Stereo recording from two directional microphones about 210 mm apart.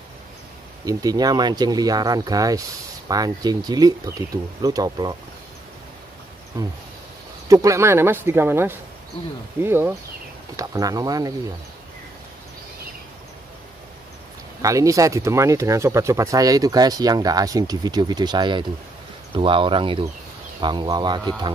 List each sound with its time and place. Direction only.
0.8 s speech: 20° right (ahead or behind)
6.5 s speech: 15° right (ahead or behind)
14.6 s speech: 15° right (ahead or behind)